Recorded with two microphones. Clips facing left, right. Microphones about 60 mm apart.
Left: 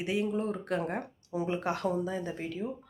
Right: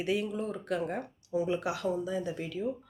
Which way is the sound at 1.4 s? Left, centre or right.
Left.